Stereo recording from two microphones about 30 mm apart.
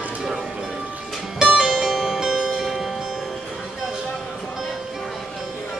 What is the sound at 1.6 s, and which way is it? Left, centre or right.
Music, centre.